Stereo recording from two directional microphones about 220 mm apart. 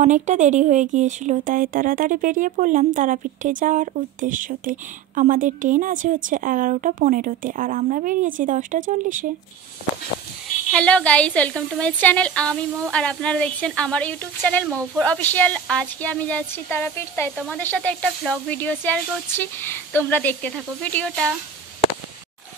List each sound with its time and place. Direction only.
0.0 s speech: 30° right (ahead or behind)
10.7 s a woman's voice: 5° left (ahead or behind)